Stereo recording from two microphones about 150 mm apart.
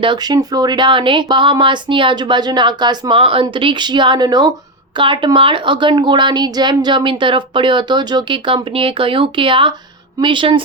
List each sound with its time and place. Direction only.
0.0 s a woman's voice: 30° right (ahead or behind)